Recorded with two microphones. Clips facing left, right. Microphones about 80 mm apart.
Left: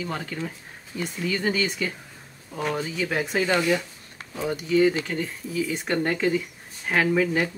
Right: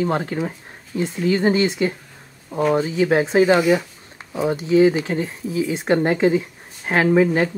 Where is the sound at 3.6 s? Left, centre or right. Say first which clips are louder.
Right 6 dB; centre.